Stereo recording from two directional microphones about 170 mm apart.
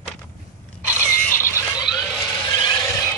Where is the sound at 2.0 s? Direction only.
25° left (ahead or behind).